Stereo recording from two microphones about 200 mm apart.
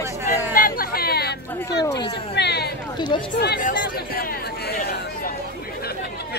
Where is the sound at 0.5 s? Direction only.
45° left (ahead or behind).